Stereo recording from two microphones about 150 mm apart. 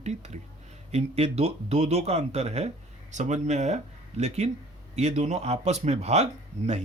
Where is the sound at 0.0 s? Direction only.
50° right (ahead or behind).